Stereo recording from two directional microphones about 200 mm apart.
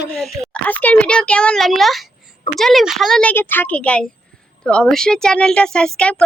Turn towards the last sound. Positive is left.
turn(degrees=5)  # may be behind; listen again after turning